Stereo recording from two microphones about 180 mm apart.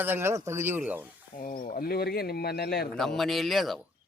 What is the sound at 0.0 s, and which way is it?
Speech, 10° right (ahead or behind).